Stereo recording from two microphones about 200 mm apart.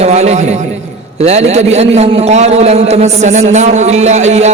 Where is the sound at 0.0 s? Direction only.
35° right (ahead or behind).